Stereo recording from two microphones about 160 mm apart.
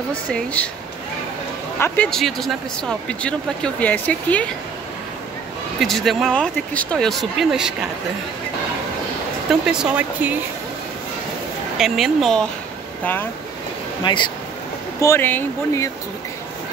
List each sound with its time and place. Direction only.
0.1 s speech: 10° left (ahead or behind)
1.8 s speech: 5° left (ahead or behind)
5.8 s speech: centre (ahead or behind)
9.5 s speech: 5° right (ahead or behind)
11.8 s speech: centre (ahead or behind)
13.0 s speech: 10° left (ahead or behind)
14.0 s speech: 30° left (ahead or behind)
15.0 s speech: 15° left (ahead or behind)